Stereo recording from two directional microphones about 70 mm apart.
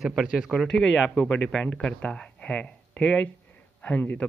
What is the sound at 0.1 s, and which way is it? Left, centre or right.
Speech, centre.